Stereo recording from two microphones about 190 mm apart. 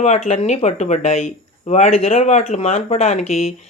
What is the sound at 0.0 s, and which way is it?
Speech, 35° left (ahead or behind).